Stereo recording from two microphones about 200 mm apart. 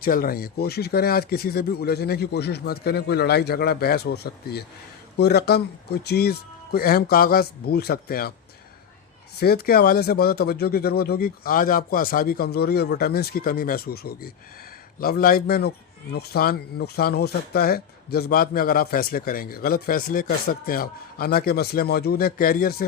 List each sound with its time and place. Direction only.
0.0 s speech: 45° left (ahead or behind)
9.4 s speech: 50° left (ahead or behind)